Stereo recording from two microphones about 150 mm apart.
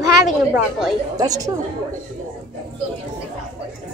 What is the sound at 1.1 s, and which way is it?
Speech, 25° right (ahead or behind).